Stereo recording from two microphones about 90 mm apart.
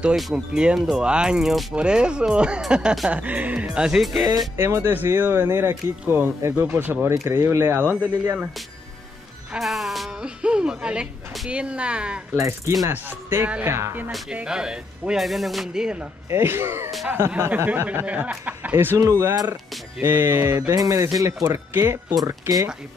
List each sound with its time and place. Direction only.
0.1 s speech: 5° right (ahead or behind)
4.6 s speech: 25° right (ahead or behind)
9.5 s music: centre (ahead or behind)
10.4 s speech: 10° right (ahead or behind)
12.4 s music: 30° right (ahead or behind)
12.9 s speech: 25° right (ahead or behind)
13.7 s music: 30° right (ahead or behind)
14.3 s speech: 10° right (ahead or behind)
16.3 s speech: 25° right (ahead or behind)
18.9 s music: 35° right (ahead or behind)
19.3 s speech: 45° right (ahead or behind)
20.0 s speech: 25° right (ahead or behind)
20.7 s music: 40° right (ahead or behind)
22.2 s speech: 45° right (ahead or behind)